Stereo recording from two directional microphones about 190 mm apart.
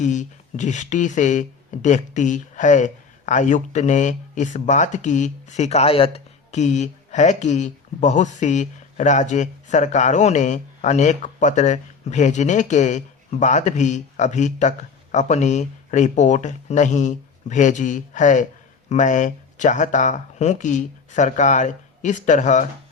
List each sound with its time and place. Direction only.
0.0 s speech: 40° left (ahead or behind)